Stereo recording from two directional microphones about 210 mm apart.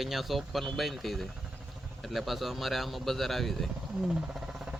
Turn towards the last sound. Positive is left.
turn(degrees=-5)  # may be behind; listen again after turning